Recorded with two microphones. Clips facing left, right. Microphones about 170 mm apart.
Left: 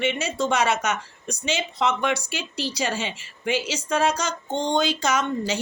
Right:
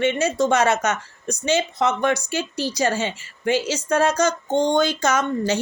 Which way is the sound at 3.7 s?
45° right (ahead or behind).